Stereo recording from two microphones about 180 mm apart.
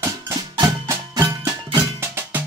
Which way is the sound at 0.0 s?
20° right (ahead or behind).